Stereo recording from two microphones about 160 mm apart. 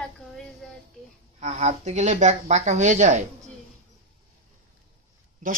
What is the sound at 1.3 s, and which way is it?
Speech, 45° right (ahead or behind).